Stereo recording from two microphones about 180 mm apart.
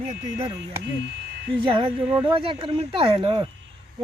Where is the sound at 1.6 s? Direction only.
30° right (ahead or behind).